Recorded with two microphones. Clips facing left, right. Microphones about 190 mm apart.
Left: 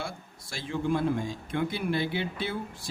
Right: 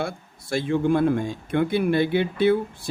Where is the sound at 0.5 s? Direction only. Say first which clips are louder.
Right 8 dB; 60° right (ahead or behind).